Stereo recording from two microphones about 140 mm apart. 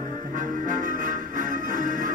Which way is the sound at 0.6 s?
70° right (ahead or behind).